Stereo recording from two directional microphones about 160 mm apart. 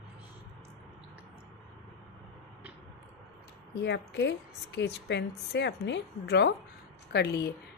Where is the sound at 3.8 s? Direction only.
90° left.